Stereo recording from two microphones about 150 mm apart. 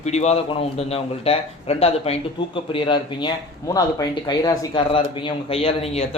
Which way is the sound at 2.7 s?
30° left (ahead or behind).